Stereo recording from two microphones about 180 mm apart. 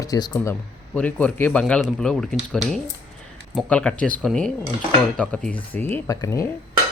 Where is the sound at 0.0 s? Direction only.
20° left (ahead or behind).